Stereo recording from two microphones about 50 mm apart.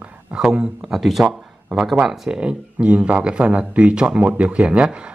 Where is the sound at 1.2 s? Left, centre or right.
Centre.